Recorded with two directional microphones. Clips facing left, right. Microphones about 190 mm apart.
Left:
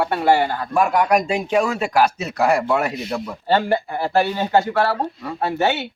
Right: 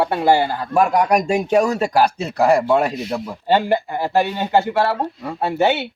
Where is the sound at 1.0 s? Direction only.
5° left (ahead or behind).